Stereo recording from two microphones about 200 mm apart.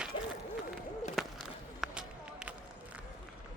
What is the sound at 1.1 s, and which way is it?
Walk, centre (ahead or behind).